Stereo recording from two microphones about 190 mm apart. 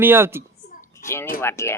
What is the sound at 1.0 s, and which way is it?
Speech, 15° left (ahead or behind).